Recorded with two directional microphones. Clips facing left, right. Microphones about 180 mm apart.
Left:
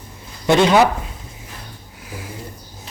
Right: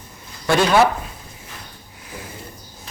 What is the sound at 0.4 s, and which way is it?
Speech, 20° left (ahead or behind).